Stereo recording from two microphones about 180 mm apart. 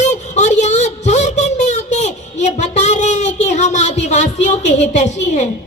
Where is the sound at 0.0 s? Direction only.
40° left (ahead or behind).